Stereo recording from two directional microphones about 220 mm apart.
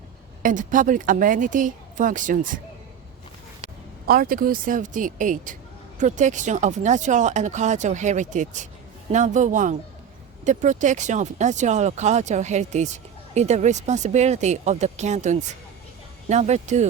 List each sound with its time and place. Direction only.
0.4 s speech: 35° right (ahead or behind)
4.0 s speech: 45° right (ahead or behind)